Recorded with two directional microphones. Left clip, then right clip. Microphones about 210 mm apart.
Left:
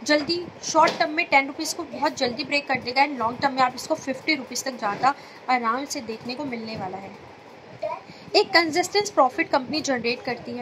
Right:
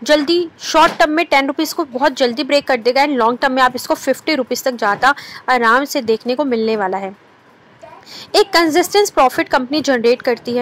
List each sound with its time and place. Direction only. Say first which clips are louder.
0.0 s a woman's voice: right 9 dB; 20° right (ahead or behind)
8.3 s a woman's voice: right 7 dB; 20° right (ahead or behind)